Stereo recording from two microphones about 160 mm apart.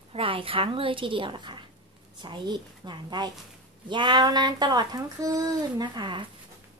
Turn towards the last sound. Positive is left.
turn(degrees=-30)  # may be behind; listen again after turning